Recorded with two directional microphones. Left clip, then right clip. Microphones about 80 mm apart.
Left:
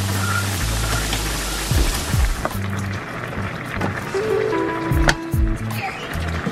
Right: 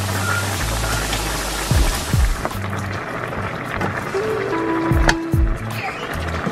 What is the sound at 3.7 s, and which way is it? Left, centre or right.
Vehicle, right.